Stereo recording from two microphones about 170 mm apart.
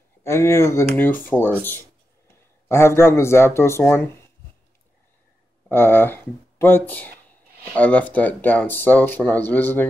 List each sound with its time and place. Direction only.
0.2 s speech: 15° left (ahead or behind)
5.7 s speech: 10° left (ahead or behind)